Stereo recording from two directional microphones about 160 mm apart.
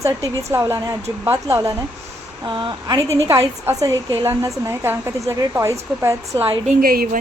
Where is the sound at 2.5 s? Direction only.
30° right (ahead or behind).